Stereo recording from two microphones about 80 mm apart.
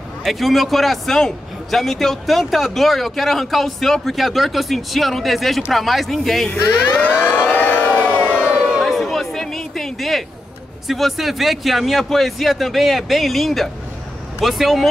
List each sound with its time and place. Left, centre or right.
0.2 s a man's voice: centre
6.5 s speech: left
7.2 s siren: left
8.5 s crowd: centre
8.8 s a sound: centre
10.9 s a man's voice: centre